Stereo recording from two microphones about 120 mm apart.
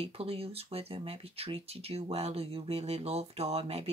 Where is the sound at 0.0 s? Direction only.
55° right (ahead or behind).